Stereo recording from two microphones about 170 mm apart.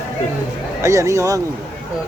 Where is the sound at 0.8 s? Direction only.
20° right (ahead or behind).